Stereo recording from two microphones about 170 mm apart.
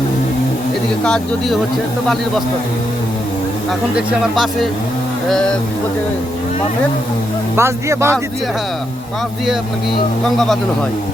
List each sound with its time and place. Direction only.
1.0 s speech: 5° left (ahead or behind)
3.7 s speech: 5° right (ahead or behind)
7.5 s speech: 15° right (ahead or behind)
10.2 s speech: centre (ahead or behind)